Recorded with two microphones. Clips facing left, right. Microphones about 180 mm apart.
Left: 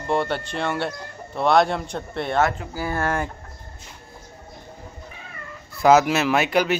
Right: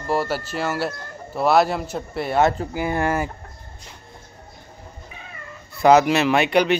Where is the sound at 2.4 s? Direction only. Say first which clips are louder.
Right 4 dB; 30° right (ahead or behind).